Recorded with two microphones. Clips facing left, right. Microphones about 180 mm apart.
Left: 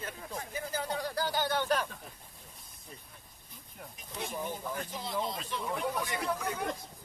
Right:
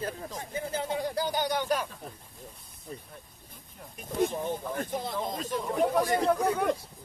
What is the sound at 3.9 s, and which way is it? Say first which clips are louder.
Speech: right 14 dB; 50° right (ahead or behind).